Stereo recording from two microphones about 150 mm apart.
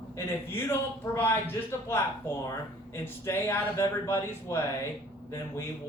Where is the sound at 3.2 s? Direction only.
15° left (ahead or behind).